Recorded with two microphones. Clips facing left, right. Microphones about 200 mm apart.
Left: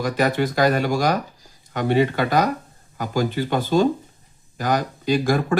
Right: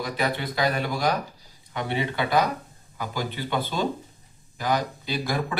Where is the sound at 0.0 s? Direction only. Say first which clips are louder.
Left 7 dB; 45° left (ahead or behind).